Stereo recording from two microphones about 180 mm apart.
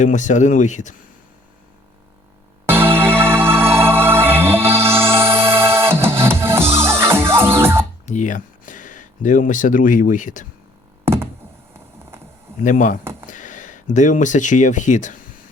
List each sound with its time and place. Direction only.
0.0 s speech: 45° left (ahead or behind)
2.6 s music: 10° right (ahead or behind)
8.0 s speech: 45° left (ahead or behind)
11.0 s thunk: 15° right (ahead or behind)
12.6 s speech: 45° left (ahead or behind)